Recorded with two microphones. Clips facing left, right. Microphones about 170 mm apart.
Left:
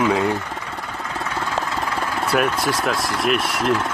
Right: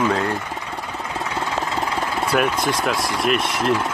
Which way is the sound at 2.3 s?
Centre (ahead or behind).